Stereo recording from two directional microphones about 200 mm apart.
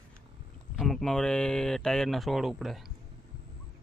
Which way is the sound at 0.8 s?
Centre (ahead or behind).